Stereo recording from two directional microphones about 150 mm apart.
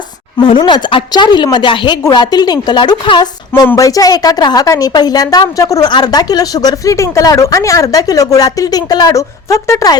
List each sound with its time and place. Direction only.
0.3 s a woman's voice: 30° left (ahead or behind)
3.5 s a woman's voice: 20° left (ahead or behind)